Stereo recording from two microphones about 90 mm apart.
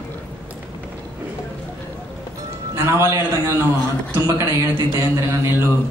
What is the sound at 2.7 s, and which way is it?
Speech, 30° right (ahead or behind).